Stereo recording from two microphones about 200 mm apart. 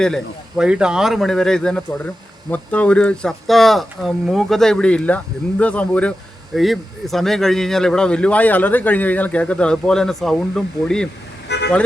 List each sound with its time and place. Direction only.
0.0 s speech: centre (ahead or behind)
11.4 s vehicle: 60° left (ahead or behind)